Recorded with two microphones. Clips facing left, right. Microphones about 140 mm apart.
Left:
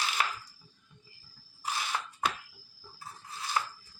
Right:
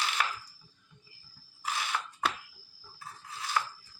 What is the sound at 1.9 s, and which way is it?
Fire alarm, 20° left (ahead or behind).